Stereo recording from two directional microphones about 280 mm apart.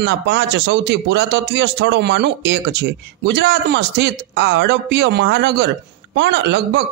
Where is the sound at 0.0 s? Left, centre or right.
Right.